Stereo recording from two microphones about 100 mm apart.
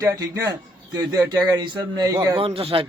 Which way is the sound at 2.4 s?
75° right (ahead or behind).